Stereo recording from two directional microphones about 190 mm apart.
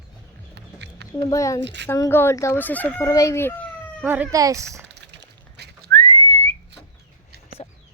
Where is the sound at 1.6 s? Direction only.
70° right (ahead or behind).